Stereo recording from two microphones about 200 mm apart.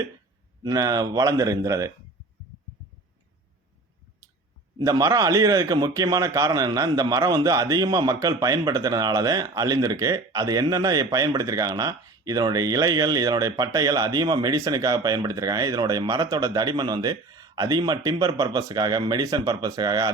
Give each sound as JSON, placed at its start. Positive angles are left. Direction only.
{"t": 0.6, "sound": "a man's voice", "side_deg": -20}
{"t": 4.9, "sound": "a man's voice", "side_deg": -20}